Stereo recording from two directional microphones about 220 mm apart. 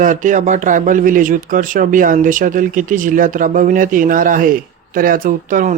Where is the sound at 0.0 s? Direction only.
35° right (ahead or behind).